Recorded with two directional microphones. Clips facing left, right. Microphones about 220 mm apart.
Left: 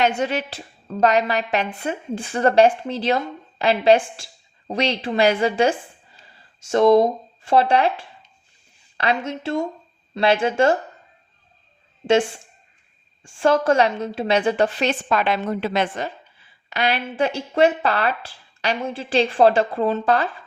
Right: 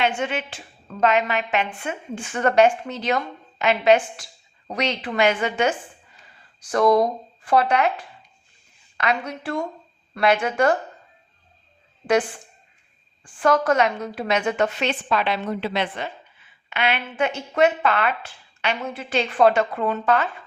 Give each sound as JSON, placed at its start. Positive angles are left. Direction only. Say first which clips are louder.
{"t": 0.2, "sound": "a woman's voice", "louder": "left 3 dB", "side_deg": 35}
{"t": 13.2, "sound": "a woman's voice", "louder": "left 2 dB", "side_deg": 25}